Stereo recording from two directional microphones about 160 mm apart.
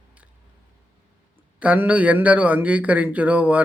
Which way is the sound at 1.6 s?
10° right (ahead or behind).